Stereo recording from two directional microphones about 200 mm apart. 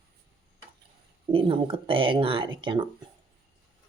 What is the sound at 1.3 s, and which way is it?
Speech, 25° right (ahead or behind).